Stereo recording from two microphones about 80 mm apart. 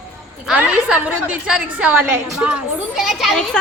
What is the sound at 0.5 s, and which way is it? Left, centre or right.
A woman's voice, centre.